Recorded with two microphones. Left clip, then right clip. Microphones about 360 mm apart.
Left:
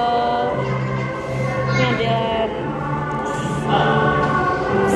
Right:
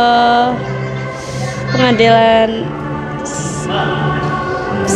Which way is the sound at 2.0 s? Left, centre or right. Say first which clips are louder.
Right 11 dB; right.